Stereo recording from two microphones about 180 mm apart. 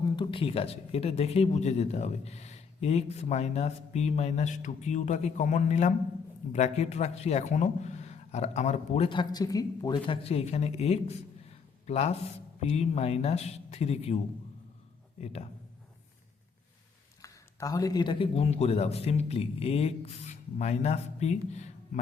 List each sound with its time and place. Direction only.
0.0 s speech: 25° left (ahead or behind)
15.2 s speech: 35° left (ahead or behind)
17.2 s speech: 20° left (ahead or behind); by 21.7 s 40° left (ahead or behind)